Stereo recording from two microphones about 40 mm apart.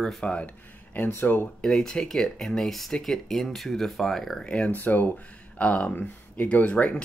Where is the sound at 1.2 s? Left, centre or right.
Left.